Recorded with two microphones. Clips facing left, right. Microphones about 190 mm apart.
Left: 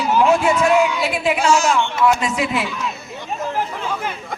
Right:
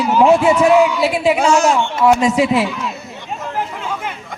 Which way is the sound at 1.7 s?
35° right (ahead or behind).